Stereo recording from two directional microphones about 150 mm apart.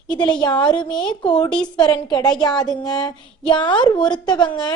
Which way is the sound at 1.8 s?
30° left (ahead or behind).